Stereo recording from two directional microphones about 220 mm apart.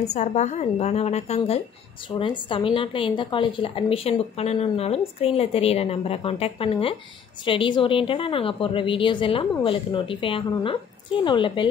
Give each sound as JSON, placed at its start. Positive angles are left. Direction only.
{"t": 0.0, "sound": "a woman's voice", "side_deg": 30}